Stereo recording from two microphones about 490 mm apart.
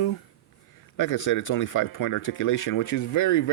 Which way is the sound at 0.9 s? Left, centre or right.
Left.